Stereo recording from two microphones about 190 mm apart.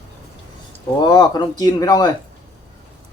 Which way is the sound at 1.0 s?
20° left (ahead or behind).